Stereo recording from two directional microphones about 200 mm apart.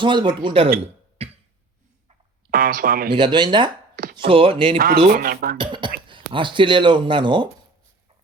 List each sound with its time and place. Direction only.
0.0 s speech: 25° right (ahead or behind)
1.2 s cough: 30° right (ahead or behind)
2.5 s speech: 45° right (ahead or behind)
3.1 s speech: 20° right (ahead or behind)
3.9 s a sound: 45° right (ahead or behind)
4.2 s speech: 25° right (ahead or behind)
5.1 s speech: 45° right (ahead or behind)
5.5 s speech: 25° right (ahead or behind)